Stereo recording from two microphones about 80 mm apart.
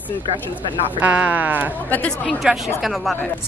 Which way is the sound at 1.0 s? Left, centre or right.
Centre.